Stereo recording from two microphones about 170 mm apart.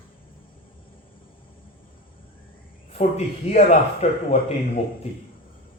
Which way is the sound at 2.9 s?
40° left (ahead or behind).